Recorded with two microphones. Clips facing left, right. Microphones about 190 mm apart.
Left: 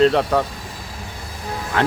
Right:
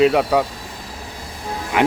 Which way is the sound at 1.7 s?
15° right (ahead or behind).